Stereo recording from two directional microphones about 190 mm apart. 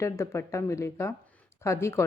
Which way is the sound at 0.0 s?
15° left (ahead or behind).